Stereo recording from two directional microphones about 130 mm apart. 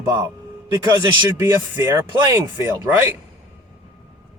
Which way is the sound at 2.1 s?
35° right (ahead or behind).